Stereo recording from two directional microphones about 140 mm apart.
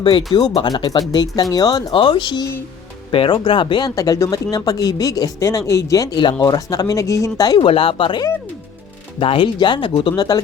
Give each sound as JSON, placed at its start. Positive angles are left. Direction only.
{"t": 0.6, "sound": "speech", "side_deg": 30}
{"t": 7.6, "sound": "speech", "side_deg": 40}